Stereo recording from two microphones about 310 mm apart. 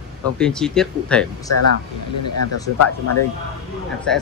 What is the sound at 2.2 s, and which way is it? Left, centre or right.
Speech, left.